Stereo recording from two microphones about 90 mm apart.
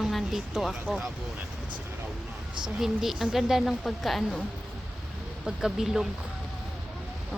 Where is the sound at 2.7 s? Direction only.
5° right (ahead or behind).